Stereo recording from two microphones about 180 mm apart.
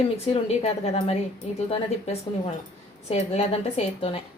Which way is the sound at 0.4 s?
35° left (ahead or behind).